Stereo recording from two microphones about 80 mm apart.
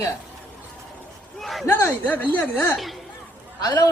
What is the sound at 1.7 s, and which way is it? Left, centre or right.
Speech, left.